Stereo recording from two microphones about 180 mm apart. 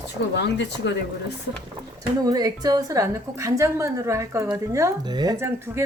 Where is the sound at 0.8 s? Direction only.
80° left.